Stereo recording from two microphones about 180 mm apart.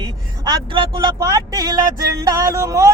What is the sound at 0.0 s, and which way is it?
Speech, 20° right (ahead or behind).